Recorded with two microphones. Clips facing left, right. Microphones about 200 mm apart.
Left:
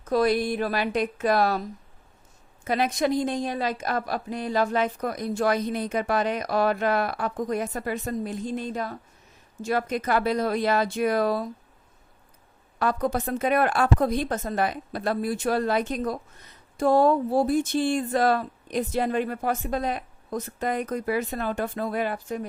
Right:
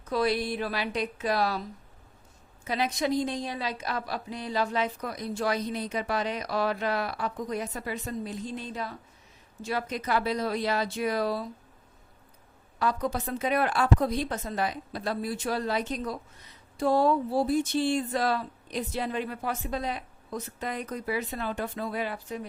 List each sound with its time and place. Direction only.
0.0 s a woman's voice: 45° left (ahead or behind)
2.6 s a woman's voice: 55° left (ahead or behind)
12.8 s a woman's voice: 55° left (ahead or behind)